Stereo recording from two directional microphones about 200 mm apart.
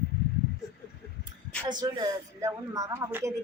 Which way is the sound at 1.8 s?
15° right (ahead or behind).